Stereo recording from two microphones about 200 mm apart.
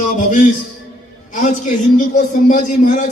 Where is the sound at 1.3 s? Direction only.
40° left (ahead or behind).